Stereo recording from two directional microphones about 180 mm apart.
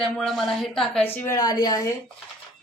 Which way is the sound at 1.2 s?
20° left (ahead or behind).